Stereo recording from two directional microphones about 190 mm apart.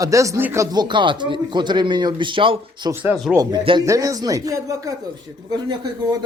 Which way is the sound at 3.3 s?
20° right (ahead or behind).